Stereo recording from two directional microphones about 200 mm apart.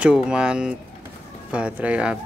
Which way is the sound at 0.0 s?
5° right (ahead or behind).